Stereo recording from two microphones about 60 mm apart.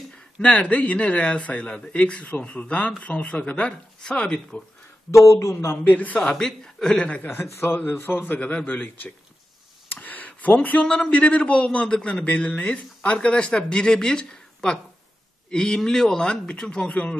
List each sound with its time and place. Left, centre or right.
0.4 s a man's voice: left
4.2 s a man's voice: centre
5.3 s a man's voice: left
5.9 s a man's voice: left
6.2 s a man's voice: centre
7.6 s speech: left
9.8 s a sound: left
11.1 s a man's voice: left